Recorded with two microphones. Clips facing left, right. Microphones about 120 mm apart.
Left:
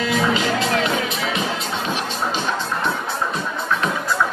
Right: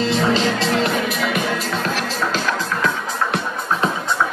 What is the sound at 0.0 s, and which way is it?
Music, 30° right (ahead or behind).